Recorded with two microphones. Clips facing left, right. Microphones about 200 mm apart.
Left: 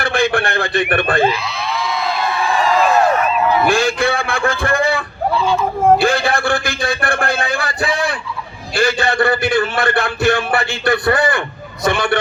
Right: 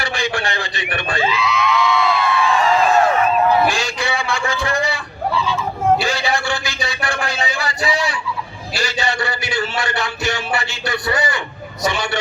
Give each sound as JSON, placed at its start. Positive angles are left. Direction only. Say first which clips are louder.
{"t": 0.0, "sound": "a man's voice", "louder": "left 6 dB", "side_deg": 55}
{"t": 1.3, "sound": "a sound", "louder": "right 3 dB", "side_deg": 35}
{"t": 3.7, "sound": "a man's voice", "louder": "left 6 dB", "side_deg": 55}